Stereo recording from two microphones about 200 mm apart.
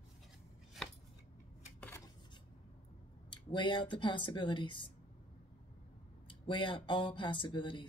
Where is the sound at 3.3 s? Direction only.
25° left (ahead or behind).